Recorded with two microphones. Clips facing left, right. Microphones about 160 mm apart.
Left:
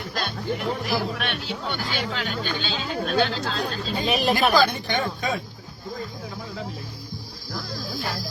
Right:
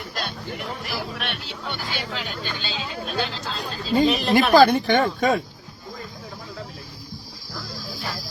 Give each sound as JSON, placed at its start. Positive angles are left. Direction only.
{"t": 0.1, "sound": "speech", "side_deg": 0}
{"t": 4.5, "sound": "speech", "side_deg": -60}